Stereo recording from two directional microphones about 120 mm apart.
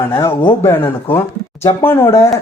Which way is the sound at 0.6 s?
20° left (ahead or behind).